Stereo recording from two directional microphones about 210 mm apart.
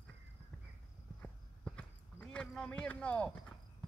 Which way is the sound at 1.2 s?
5° left (ahead or behind).